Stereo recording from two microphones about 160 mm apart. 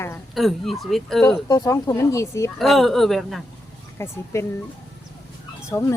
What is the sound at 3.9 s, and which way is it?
Speech, 15° left (ahead or behind).